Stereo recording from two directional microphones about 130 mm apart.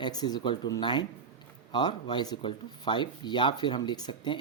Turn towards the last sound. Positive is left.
turn(degrees=35)  # may be behind; listen again after turning